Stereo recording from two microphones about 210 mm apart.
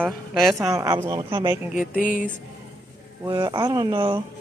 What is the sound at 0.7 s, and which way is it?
Speech, 15° right (ahead or behind).